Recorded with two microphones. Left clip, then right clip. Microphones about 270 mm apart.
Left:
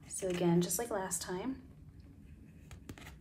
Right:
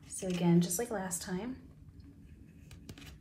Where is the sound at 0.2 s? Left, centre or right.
Centre.